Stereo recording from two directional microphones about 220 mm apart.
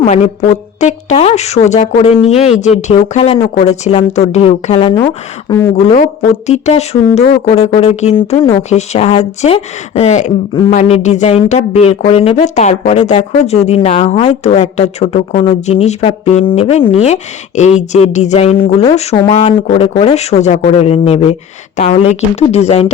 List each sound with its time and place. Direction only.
0.0 s a woman's voice: 30° left (ahead or behind)
4.9 s speech: 10° left (ahead or behind)
5.7 s speech: 30° left (ahead or behind)